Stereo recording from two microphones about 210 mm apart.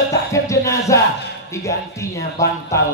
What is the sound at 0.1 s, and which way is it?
Music, 15° left (ahead or behind).